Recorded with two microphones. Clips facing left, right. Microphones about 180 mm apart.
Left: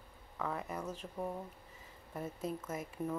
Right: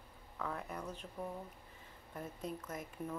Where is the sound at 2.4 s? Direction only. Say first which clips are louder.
Left 4 dB; 5° left (ahead or behind).